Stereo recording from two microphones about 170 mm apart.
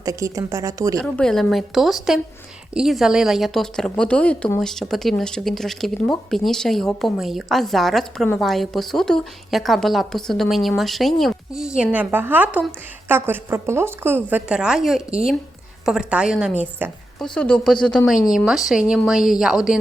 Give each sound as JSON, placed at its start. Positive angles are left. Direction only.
{"t": 0.0, "sound": "speech", "side_deg": -20}
{"t": 0.9, "sound": "a woman's voice", "side_deg": 5}
{"t": 17.3, "sound": "a woman's voice", "side_deg": 5}